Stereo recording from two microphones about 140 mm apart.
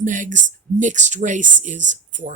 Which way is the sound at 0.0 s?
65° right (ahead or behind).